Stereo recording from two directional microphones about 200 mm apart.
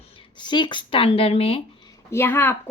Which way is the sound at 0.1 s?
25° left (ahead or behind).